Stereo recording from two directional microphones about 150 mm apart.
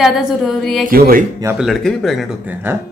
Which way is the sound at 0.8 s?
80° right.